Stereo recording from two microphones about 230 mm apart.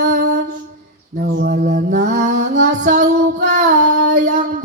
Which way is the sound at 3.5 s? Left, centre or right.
Right.